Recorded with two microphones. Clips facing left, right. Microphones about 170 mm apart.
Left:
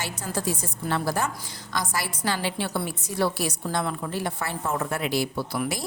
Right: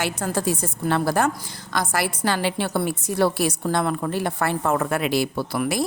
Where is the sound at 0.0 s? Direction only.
60° right (ahead or behind).